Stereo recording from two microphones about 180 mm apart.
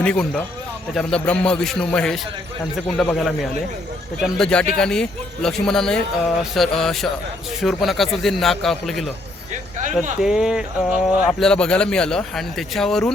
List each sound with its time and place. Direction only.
0.0 s speech: 5° left (ahead or behind)
9.7 s speech: 45° right (ahead or behind)
10.2 s speech: 5° right (ahead or behind)